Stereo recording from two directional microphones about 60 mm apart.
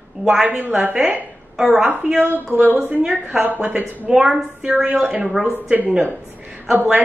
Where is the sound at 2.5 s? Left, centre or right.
Right.